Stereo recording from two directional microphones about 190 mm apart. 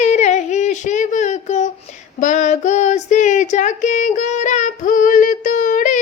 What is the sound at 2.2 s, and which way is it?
Child singing, 40° left (ahead or behind).